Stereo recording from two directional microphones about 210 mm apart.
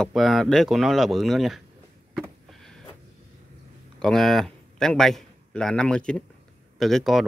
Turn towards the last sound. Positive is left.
turn(degrees=0)  # may be behind; listen again after turning